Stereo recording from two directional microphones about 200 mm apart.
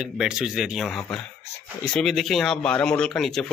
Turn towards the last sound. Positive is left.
turn(degrees=0)  # may be behind; listen again after turning